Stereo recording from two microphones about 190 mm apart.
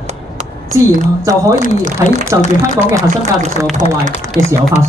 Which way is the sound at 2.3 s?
15° right (ahead or behind).